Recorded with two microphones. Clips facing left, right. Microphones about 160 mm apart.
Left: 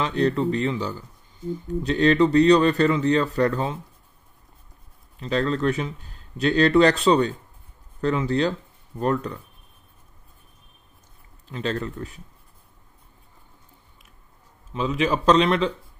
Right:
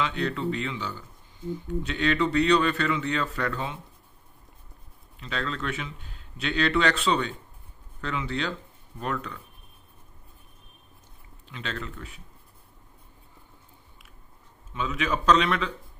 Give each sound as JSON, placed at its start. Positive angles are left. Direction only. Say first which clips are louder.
{"t": 0.0, "sound": "speech", "louder": "left 6 dB", "side_deg": 40}
{"t": 5.2, "sound": "speech", "louder": "left 9 dB", "side_deg": 40}
{"t": 11.4, "sound": "speech", "louder": "left 8 dB", "side_deg": 40}
{"t": 14.7, "sound": "speech", "louder": "left 5 dB", "side_deg": 30}